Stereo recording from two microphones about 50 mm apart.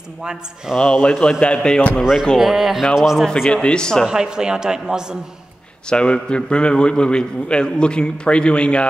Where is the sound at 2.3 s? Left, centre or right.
Centre.